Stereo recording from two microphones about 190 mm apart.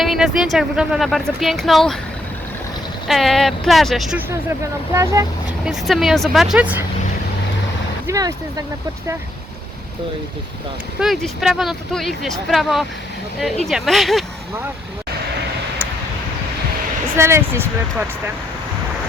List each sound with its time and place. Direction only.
0.0 s speech: centre (ahead or behind)
3.1 s speech: centre (ahead or behind)
4.4 s speech: 15° right (ahead or behind)
5.6 s speech: centre (ahead or behind)
8.0 s speech: 20° right (ahead or behind)
11.0 s speech: centre (ahead or behind)
17.2 s speech: 15° right (ahead or behind)